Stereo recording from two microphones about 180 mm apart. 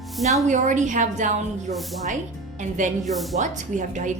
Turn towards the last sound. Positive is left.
turn(degrees=-45)  # may be behind; listen again after turning